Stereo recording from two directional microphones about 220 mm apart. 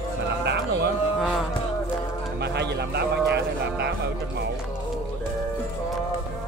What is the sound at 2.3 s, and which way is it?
Speech, 50° right (ahead or behind).